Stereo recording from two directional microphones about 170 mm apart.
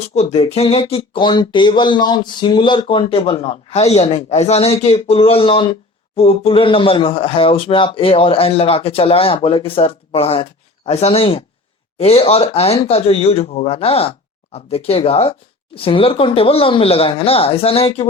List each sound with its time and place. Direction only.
0.1 s speech: 40° left (ahead or behind)